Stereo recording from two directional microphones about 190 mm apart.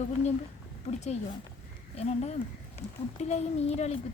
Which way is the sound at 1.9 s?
35° left (ahead or behind).